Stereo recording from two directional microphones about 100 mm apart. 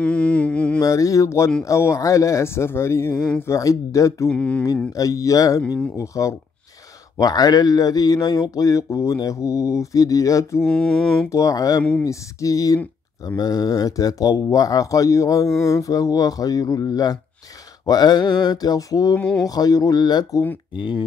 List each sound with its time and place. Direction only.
0.0 s mantra: 10° left (ahead or behind)
0.8 s speech: 35° left (ahead or behind)
4.3 s a sound: 10° left (ahead or behind)
4.9 s speech: 35° left (ahead or behind)
10.6 s mantra: 5° left (ahead or behind)
11.3 s speech: 35° left (ahead or behind)